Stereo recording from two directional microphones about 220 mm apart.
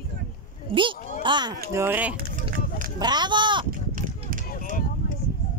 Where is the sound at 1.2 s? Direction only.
20° right (ahead or behind).